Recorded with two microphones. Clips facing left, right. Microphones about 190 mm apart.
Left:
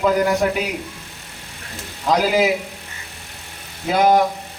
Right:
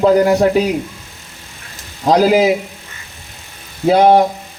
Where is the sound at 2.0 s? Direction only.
35° right (ahead or behind).